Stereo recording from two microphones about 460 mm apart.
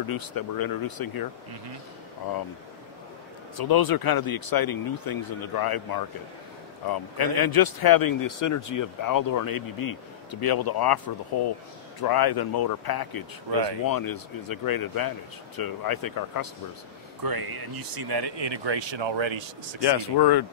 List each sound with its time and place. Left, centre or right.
0.0 s speech: left
3.5 s speech: left
6.9 s speech: left
12.0 s speech: left
17.2 s speech: right
19.8 s speech: left